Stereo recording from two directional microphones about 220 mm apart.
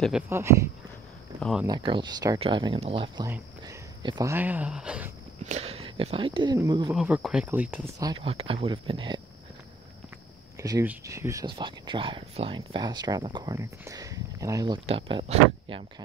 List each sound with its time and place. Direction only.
0.3 s speech: 10° right (ahead or behind)
1.4 s speech: centre (ahead or behind)
1.7 s speech: 20° right (ahead or behind); by 5.1 s 5° right (ahead or behind)
5.4 s speech: 30° right (ahead or behind)
6.9 s speech: 5° right (ahead or behind); by 9.2 s 20° right (ahead or behind)
10.6 s speech: 15° right (ahead or behind)